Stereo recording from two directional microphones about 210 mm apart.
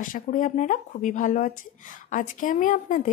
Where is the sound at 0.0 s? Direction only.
40° left (ahead or behind).